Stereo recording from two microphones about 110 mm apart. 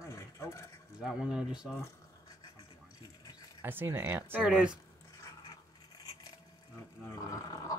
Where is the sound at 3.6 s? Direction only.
20° right (ahead or behind).